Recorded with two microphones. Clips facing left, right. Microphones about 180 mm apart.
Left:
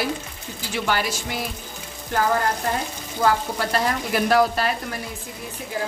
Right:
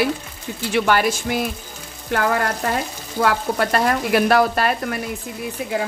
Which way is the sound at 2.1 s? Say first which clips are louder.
Right 2 dB; 65° right (ahead or behind).